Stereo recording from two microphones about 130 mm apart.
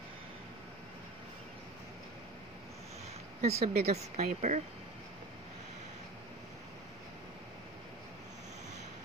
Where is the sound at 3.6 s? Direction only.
55° right (ahead or behind).